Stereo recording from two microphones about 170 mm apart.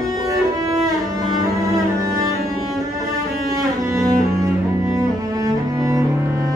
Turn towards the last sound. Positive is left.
turn(degrees=-20)  # may be behind; listen again after turning